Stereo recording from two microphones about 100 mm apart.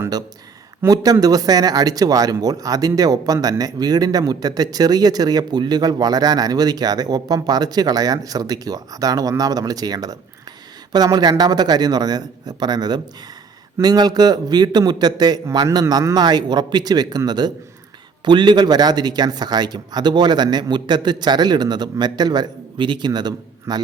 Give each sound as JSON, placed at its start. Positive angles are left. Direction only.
{"t": 0.9, "sound": "speech", "side_deg": -40}